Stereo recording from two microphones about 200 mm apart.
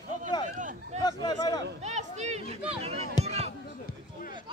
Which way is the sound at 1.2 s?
20° left (ahead or behind).